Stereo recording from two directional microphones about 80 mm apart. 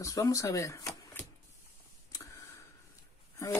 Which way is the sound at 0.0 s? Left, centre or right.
Left.